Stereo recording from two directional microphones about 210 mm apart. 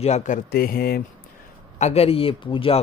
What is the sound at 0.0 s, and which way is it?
Speech, 30° left (ahead or behind).